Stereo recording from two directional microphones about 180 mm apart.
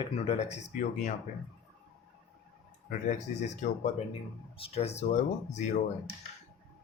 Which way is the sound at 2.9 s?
40° left (ahead or behind).